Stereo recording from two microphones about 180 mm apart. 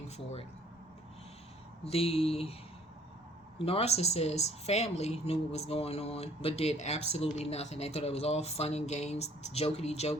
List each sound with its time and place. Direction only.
1.8 s a woman's voice: 35° left (ahead or behind)
3.6 s a woman's voice: 35° left (ahead or behind)